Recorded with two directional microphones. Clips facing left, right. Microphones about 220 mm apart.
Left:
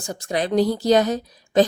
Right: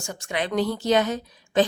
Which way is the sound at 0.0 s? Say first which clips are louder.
Left 4 dB; 35° left (ahead or behind).